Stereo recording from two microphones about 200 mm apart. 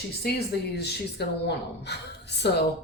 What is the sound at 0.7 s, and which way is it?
Speech, 55° left (ahead or behind).